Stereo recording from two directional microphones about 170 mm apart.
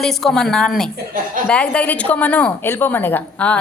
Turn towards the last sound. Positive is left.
turn(degrees=10)  # may be behind; listen again after turning